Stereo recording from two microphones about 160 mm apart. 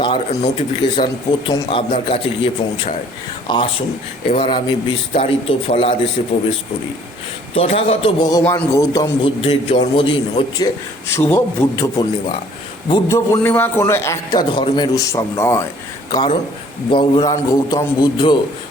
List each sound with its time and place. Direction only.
0.0 s a man's voice: 40° left (ahead or behind)
7.5 s a man's voice: 40° left (ahead or behind)
8.4 s a man's voice: 20° left (ahead or behind)
9.4 s a man's voice: 35° left (ahead or behind)
11.1 s a man's voice: 15° left (ahead or behind)
14.5 s a man's voice: 30° left (ahead or behind)
16.1 s a man's voice: 30° left (ahead or behind)